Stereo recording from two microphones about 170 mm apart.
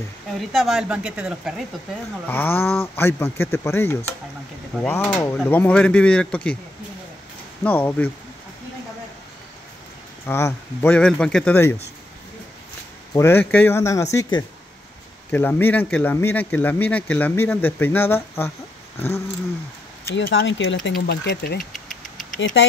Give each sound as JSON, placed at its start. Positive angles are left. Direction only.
{"t": 0.4, "sound": "speech", "side_deg": 0}
{"t": 2.2, "sound": "speech", "side_deg": 10}
{"t": 7.6, "sound": "speech", "side_deg": 10}
{"t": 10.2, "sound": "speech", "side_deg": 15}
{"t": 13.1, "sound": "speech", "side_deg": 15}
{"t": 15.3, "sound": "speech", "side_deg": 10}
{"t": 20.1, "sound": "speech", "side_deg": 75}
{"t": 21.7, "sound": "engine", "side_deg": 0}
{"t": 22.4, "sound": "speech", "side_deg": 90}